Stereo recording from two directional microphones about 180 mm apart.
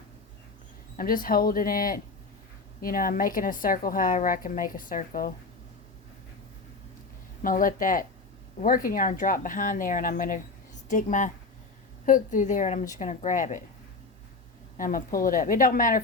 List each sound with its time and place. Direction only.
0.9 s a woman's voice: 50° left (ahead or behind)
7.4 s a woman's voice: 50° left (ahead or behind)
14.8 s a woman's voice: 50° left (ahead or behind)